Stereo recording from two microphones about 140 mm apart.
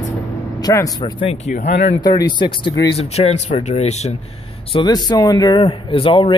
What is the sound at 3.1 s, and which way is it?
Speech, 50° left (ahead or behind).